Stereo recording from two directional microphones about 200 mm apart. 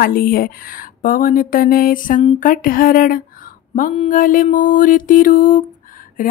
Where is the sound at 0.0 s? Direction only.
45° left (ahead or behind).